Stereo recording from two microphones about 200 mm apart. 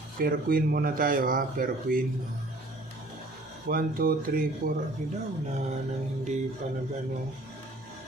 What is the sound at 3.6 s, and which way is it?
Speech, 45° right (ahead or behind).